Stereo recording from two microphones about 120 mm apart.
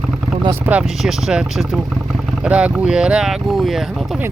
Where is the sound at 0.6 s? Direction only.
10° right (ahead or behind).